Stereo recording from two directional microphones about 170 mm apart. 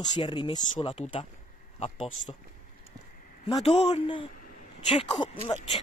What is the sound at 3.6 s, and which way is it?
Speech, 40° left (ahead or behind).